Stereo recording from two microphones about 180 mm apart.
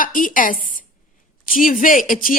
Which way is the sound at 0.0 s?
50° left (ahead or behind).